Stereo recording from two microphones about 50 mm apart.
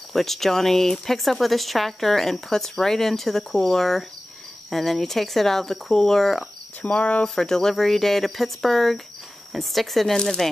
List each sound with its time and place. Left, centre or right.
0.1 s speech: centre
6.8 s speech: left
7.3 s speech: centre